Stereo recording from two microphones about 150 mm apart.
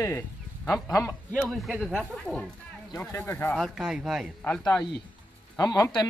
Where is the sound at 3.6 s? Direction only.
5° right (ahead or behind).